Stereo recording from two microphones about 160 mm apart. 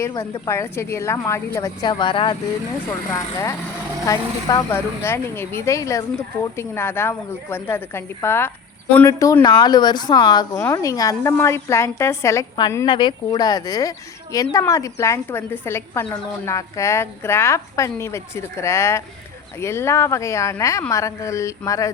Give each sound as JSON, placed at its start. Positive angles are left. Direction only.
{"t": 0.2, "sound": "speech", "side_deg": 15}
{"t": 3.1, "sound": "speech", "side_deg": 20}